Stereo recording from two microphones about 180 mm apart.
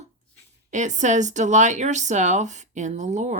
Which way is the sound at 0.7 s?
45° right (ahead or behind).